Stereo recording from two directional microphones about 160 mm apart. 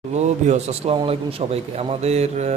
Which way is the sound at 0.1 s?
45° right (ahead or behind).